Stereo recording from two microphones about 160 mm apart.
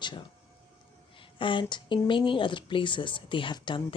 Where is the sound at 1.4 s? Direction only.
30° left (ahead or behind).